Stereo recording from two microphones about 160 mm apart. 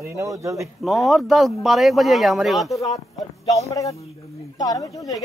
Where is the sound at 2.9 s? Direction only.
45° left (ahead or behind).